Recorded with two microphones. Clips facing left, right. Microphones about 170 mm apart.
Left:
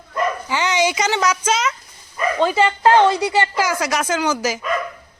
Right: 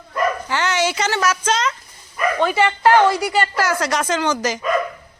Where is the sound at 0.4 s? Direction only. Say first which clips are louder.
Left 1 dB; 15° left (ahead or behind).